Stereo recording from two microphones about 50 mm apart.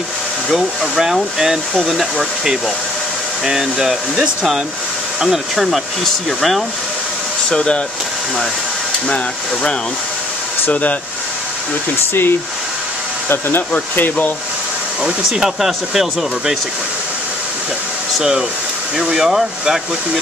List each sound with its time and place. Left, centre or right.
0.5 s speech: centre
5.2 s speech: centre
7.4 s speech: centre
9.1 s speech: left
12.1 s speech: left
13.7 s speech: left
15.0 s speech: centre
19.1 s speech: centre